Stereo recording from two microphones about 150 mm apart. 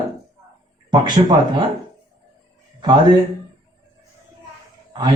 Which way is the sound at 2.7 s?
30° right (ahead or behind).